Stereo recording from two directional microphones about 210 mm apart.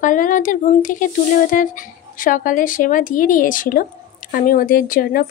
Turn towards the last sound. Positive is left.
turn(degrees=40)  # may be behind; listen again after turning